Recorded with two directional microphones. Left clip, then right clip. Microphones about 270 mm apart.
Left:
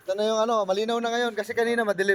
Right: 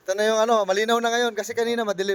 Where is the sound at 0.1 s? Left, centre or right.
Right.